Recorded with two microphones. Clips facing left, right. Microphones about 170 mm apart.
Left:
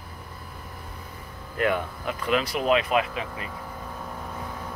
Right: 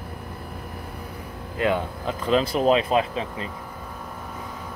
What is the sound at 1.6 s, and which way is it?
Speech, 25° right (ahead or behind).